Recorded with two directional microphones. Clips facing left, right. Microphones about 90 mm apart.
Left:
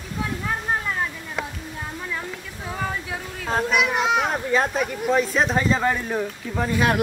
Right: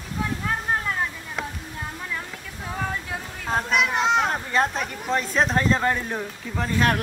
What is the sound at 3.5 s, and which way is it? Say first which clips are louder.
A child's voice: left 1 dB; centre (ahead or behind).